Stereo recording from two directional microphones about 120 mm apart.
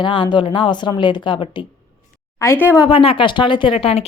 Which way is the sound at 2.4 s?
20° left (ahead or behind).